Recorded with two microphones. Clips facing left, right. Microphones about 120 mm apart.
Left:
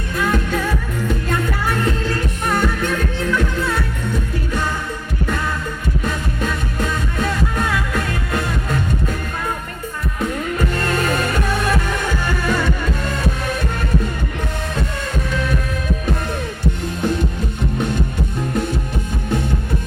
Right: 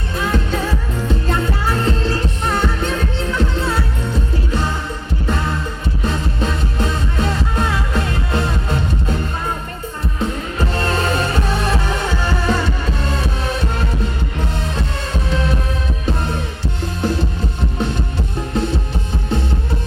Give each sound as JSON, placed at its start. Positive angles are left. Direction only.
{"t": 0.2, "sound": "music", "side_deg": -30}
{"t": 6.1, "sound": "music", "side_deg": -25}
{"t": 10.2, "sound": "music", "side_deg": -30}
{"t": 15.3, "sound": "heart sounds", "side_deg": -30}